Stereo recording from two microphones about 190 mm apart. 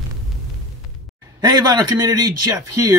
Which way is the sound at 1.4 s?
20° right (ahead or behind).